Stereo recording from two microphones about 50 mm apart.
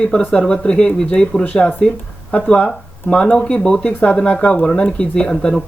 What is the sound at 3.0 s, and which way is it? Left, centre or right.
Speech, centre.